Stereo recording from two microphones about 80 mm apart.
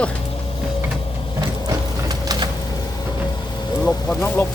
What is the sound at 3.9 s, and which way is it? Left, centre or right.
Speech, centre.